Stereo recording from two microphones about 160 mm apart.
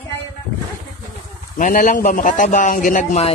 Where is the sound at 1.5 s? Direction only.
55° left (ahead or behind).